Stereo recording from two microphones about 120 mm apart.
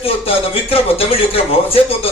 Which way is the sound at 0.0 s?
55° left (ahead or behind).